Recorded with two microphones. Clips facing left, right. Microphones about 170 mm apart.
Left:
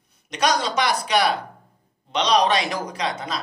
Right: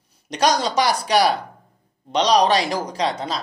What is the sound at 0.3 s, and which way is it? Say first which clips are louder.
Speech: right 3 dB; 35° right (ahead or behind).